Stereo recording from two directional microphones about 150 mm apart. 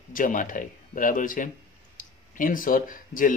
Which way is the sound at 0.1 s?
60° left (ahead or behind).